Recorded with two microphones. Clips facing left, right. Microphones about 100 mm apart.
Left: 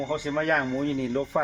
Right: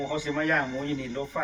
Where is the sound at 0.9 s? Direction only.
55° left (ahead or behind).